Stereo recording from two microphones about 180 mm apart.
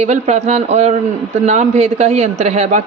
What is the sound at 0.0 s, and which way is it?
A man's voice, 40° right (ahead or behind).